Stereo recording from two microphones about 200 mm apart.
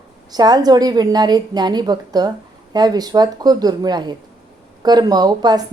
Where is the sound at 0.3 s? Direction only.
20° right (ahead or behind).